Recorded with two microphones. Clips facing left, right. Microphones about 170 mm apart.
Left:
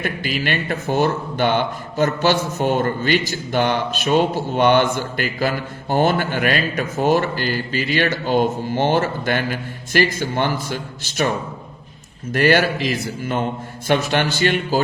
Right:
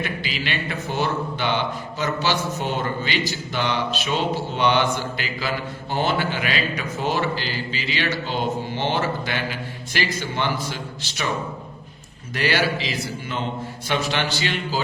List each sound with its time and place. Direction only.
0.0 s a man's voice: 50° left (ahead or behind)
12.3 s a man's voice: 50° left (ahead or behind)